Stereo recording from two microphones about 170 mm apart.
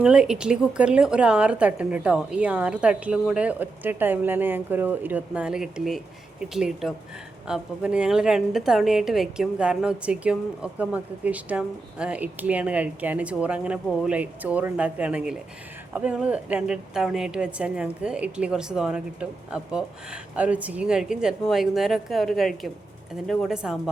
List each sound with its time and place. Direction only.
0.0 s a woman's voice: 5° right (ahead or behind)